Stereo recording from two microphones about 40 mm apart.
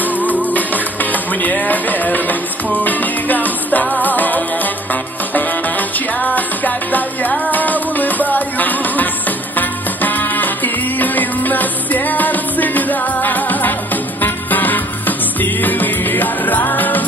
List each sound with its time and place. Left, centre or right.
1.1 s music: left